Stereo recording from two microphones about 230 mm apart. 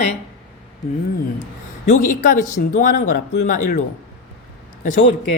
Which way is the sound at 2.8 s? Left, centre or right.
Left.